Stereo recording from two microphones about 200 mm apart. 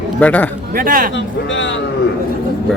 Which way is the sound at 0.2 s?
5° left (ahead or behind).